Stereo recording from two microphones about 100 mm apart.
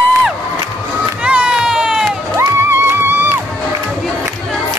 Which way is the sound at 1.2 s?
10° right (ahead or behind).